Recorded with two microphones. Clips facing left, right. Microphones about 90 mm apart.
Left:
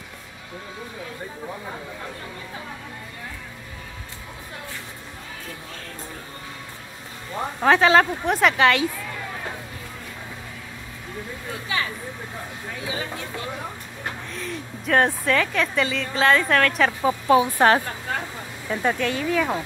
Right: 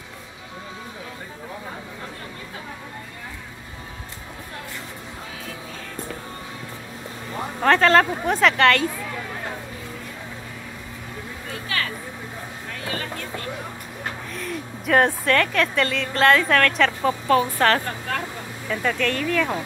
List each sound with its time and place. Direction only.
7.6 s a woman's voice: 5° left (ahead or behind)
12.8 s speech: 10° left (ahead or behind)
14.3 s a woman's voice: centre (ahead or behind); by 18.9 s 25° left (ahead or behind)
18.9 s speech: 10° left (ahead or behind)